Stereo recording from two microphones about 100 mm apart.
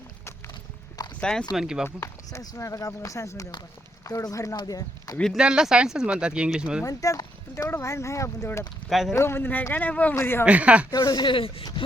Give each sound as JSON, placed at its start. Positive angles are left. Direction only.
{"t": 1.2, "sound": "speech", "side_deg": 10}
{"t": 1.5, "sound": "speech", "side_deg": -5}
{"t": 2.0, "sound": "speech", "side_deg": 35}
{"t": 5.3, "sound": "speech", "side_deg": -10}
{"t": 6.8, "sound": "speech", "side_deg": 35}
{"t": 8.9, "sound": "speech", "side_deg": -5}
{"t": 9.1, "sound": "speech", "side_deg": 25}
{"t": 10.4, "sound": "speech", "side_deg": -10}
{"t": 10.9, "sound": "speech", "side_deg": 45}